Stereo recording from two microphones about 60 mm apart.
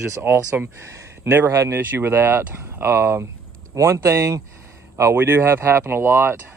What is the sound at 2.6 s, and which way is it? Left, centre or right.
Speech, right.